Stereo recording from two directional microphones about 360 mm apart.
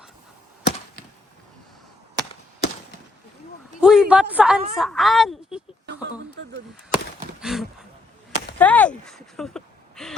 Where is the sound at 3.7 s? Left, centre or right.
Centre.